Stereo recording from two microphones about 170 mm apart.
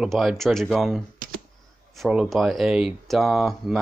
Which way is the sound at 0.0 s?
Centre (ahead or behind).